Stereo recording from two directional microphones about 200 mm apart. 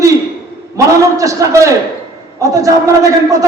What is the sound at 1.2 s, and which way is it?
A man's voice, 15° right (ahead or behind).